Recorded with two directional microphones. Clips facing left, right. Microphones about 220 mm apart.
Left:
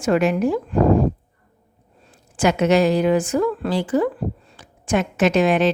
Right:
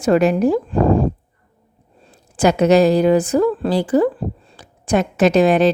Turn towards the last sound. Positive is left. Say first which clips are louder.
# right 4 dB
turn(degrees=-35)  # may be behind; listen again after turning